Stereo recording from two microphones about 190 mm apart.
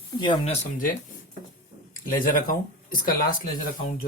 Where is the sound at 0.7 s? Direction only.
45° left (ahead or behind).